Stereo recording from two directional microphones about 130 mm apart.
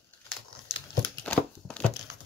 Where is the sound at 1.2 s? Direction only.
10° left (ahead or behind).